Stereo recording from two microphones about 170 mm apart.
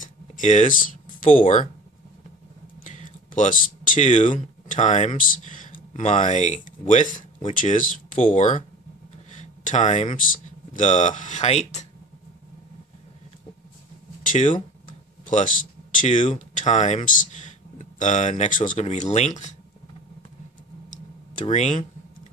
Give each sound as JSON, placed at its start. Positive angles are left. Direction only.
{"t": 0.0, "sound": "a sound", "side_deg": 45}
{"t": 2.8, "sound": "speech", "side_deg": 45}
{"t": 14.2, "sound": "speech", "side_deg": 50}
{"t": 21.5, "sound": "speech", "side_deg": 45}